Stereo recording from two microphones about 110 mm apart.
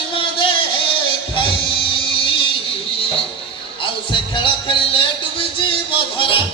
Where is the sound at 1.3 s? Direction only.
50° left (ahead or behind).